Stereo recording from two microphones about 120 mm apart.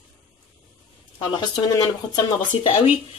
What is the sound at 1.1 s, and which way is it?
Speech, 35° left (ahead or behind).